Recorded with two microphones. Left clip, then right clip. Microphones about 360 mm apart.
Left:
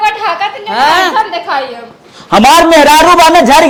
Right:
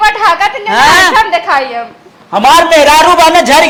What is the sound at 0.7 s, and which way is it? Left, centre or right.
Chuckle, right.